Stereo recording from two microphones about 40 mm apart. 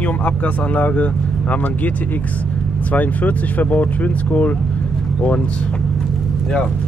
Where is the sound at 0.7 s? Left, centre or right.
Left.